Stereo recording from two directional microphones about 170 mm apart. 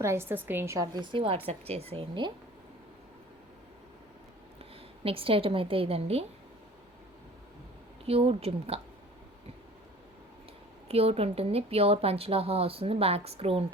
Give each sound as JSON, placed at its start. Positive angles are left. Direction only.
{"t": 0.0, "sound": "a woman's voice", "side_deg": -15}
{"t": 5.0, "sound": "speech", "side_deg": -35}
{"t": 8.0, "sound": "speech", "side_deg": -35}
{"t": 10.8, "sound": "speech", "side_deg": -35}